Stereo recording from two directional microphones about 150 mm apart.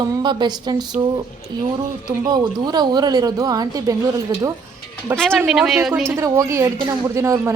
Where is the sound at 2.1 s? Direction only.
25° right (ahead or behind).